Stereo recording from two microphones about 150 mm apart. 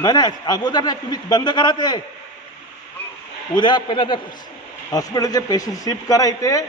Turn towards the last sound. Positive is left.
turn(degrees=25)  # may be behind; listen again after turning